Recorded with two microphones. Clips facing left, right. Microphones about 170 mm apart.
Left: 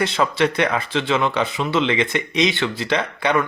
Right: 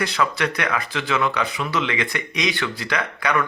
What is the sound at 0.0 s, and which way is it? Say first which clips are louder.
A man's voice: left 4 dB; 25° left (ahead or behind).